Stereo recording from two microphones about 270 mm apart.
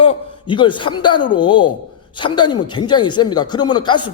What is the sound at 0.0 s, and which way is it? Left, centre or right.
A man's voice, centre.